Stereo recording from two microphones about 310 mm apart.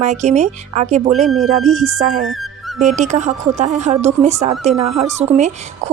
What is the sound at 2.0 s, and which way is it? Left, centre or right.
A woman's voice, right.